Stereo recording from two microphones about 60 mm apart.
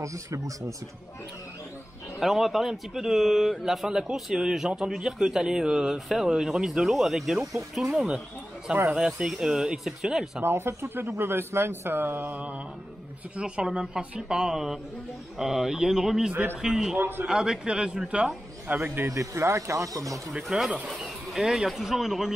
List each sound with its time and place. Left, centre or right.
0.0 s speech: right
2.1 s speech: centre
10.4 s speech: right; by 16.9 s centre
17.0 s speech: right
17.3 s speech: centre
18.7 s speech: right
19.0 s speech: right
20.4 s speech: centre